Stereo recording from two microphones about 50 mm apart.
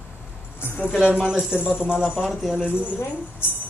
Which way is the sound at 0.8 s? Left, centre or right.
Left.